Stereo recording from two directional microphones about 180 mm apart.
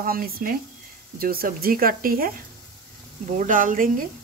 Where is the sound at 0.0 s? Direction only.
55° right (ahead or behind).